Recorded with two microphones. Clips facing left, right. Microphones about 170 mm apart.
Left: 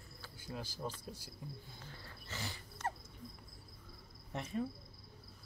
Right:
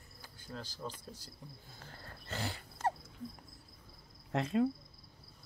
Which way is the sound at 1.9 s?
50° right (ahead or behind).